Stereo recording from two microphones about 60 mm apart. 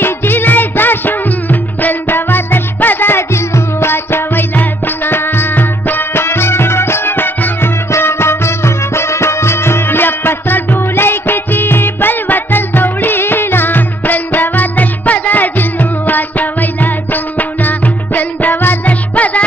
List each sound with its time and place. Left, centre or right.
0.0 s music: left